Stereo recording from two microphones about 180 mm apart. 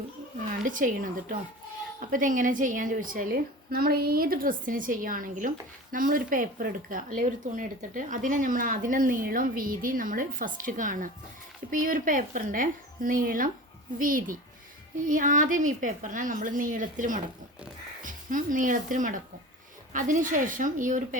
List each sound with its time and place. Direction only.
0.6 s a woman's voice: 45° right (ahead or behind)